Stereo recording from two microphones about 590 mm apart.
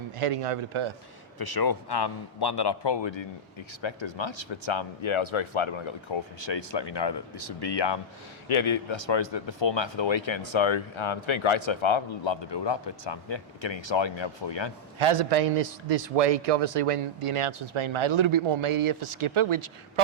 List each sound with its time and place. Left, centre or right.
0.2 s a man's voice: right
1.4 s a man's voice: left
8.4 s speech: left
14.9 s a man's voice: right